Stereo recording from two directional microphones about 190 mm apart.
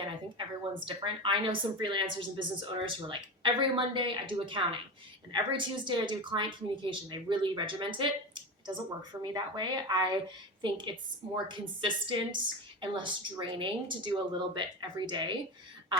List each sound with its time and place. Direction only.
0.3 s a woman's voice: 25° right (ahead or behind)